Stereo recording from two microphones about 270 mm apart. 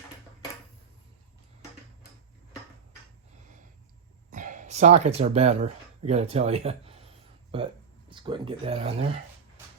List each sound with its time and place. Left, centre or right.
4.3 s speech: right